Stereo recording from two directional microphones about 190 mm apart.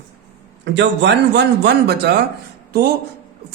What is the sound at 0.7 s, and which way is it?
Speech, 65° right (ahead or behind).